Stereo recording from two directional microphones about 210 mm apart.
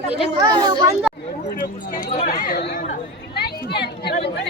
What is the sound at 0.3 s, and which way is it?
Speech, 20° right (ahead or behind).